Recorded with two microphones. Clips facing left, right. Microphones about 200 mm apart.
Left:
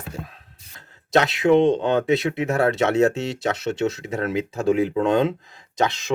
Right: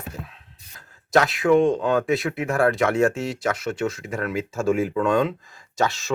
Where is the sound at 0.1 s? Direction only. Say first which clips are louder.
Left 6 dB; 40° left (ahead or behind).